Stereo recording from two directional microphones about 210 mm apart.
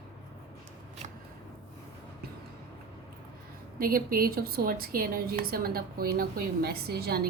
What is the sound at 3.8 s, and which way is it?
A woman's voice, 45° right (ahead or behind).